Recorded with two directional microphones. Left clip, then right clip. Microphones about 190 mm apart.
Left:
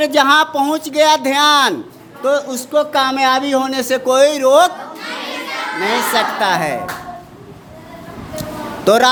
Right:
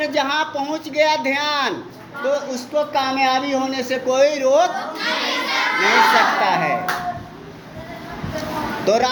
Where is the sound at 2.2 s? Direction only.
55° left (ahead or behind).